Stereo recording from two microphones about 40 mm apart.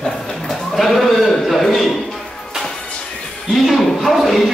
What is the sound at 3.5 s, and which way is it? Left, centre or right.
Music, centre.